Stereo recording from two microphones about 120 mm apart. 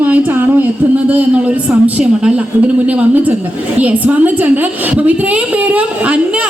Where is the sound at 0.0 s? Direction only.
15° right (ahead or behind).